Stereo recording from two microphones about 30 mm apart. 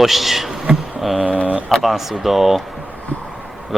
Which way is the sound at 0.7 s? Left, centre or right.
Right.